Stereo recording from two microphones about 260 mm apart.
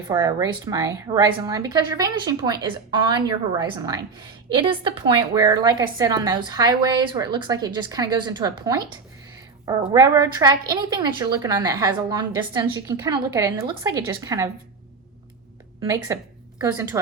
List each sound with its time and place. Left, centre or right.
0.1 s a woman's voice: centre
15.8 s a woman's voice: centre